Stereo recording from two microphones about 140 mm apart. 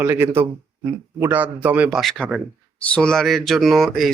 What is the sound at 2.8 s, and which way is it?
Speech, 5° left (ahead or behind).